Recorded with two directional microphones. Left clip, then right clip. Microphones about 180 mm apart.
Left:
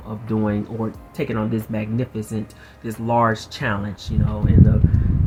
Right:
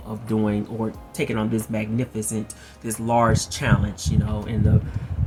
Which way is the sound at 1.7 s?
15° right (ahead or behind).